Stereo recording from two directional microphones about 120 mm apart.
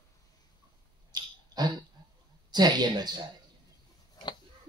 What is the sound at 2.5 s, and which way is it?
Speech, 35° right (ahead or behind).